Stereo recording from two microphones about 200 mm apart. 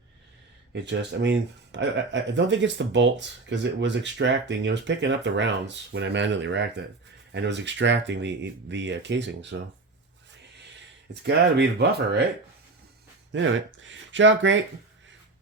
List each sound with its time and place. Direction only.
0.7 s speech: 60° right (ahead or behind)
11.1 s speech: 55° right (ahead or behind)
13.3 s speech: 70° right (ahead or behind)